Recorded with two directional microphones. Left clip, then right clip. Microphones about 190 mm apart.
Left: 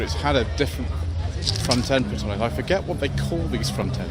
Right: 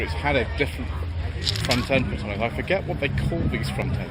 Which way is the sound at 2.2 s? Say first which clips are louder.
Left 1 dB; 10° left (ahead or behind).